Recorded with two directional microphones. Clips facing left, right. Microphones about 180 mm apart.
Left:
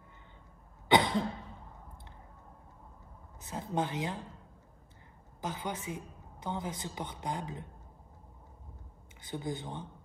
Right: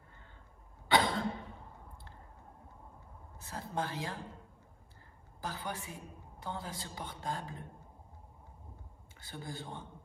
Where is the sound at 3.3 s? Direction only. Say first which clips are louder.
Left 4 dB; 20° left (ahead or behind).